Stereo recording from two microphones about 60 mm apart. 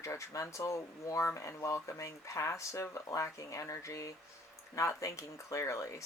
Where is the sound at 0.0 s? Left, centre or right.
Left.